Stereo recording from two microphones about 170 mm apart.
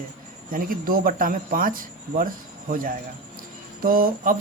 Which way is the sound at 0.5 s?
55° right (ahead or behind).